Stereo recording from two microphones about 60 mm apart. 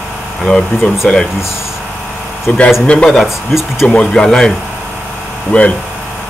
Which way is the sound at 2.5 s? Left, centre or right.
Left.